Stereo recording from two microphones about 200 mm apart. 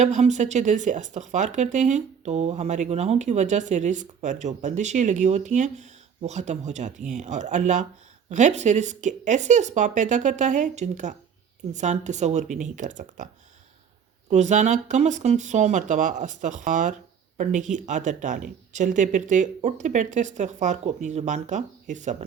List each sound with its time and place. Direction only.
0.0 s speech: 35° right (ahead or behind)
14.3 s speech: 35° right (ahead or behind)